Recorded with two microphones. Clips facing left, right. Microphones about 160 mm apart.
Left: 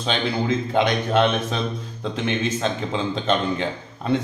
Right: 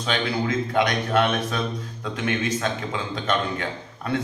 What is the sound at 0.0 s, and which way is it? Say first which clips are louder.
A man's voice: left 1 dB; 25° left (ahead or behind).